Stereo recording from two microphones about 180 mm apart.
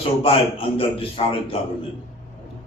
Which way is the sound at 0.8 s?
30° left (ahead or behind).